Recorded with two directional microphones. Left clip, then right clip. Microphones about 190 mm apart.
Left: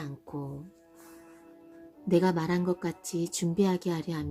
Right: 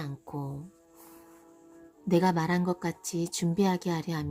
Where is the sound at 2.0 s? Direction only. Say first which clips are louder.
Even; 20° right (ahead or behind).